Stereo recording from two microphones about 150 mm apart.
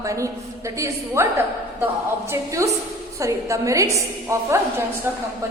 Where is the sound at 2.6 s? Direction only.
20° right (ahead or behind).